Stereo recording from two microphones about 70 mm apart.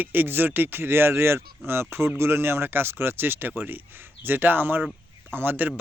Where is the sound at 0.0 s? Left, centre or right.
Right.